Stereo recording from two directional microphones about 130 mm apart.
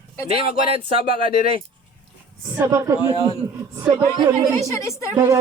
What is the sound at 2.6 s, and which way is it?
Speech, 25° right (ahead or behind).